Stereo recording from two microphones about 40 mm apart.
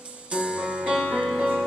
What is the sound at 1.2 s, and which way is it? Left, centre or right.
Music, centre.